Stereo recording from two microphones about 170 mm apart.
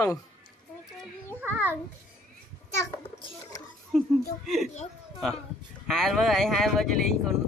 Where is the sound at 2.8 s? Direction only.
20° left (ahead or behind).